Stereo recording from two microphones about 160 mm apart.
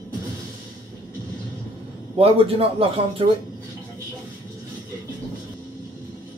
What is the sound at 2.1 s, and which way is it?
A man's voice, 35° right (ahead or behind).